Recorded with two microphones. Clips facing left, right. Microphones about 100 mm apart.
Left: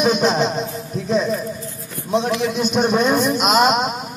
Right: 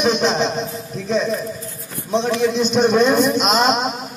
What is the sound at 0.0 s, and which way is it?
A man's voice, 5° left (ahead or behind).